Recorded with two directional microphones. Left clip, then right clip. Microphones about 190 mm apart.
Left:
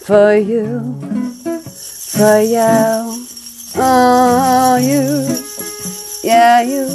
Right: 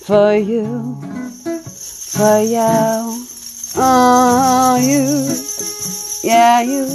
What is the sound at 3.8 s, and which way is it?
Music, 15° right (ahead or behind).